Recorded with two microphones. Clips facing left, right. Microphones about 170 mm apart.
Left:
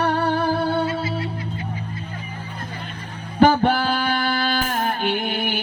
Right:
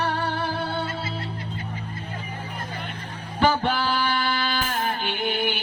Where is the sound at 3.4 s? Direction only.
50° left (ahead or behind).